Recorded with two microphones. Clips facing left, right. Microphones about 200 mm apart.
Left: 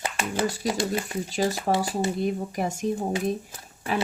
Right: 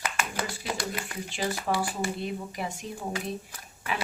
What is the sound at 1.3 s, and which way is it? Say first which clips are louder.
A woman's voice: left 5 dB; 40° left (ahead or behind).